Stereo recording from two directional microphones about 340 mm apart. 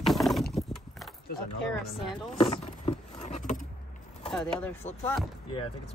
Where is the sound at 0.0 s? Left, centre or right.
Centre.